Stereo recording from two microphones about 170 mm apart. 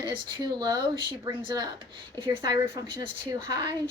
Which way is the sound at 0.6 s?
25° right (ahead or behind).